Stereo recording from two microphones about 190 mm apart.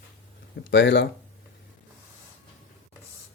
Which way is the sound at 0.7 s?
70° left (ahead or behind).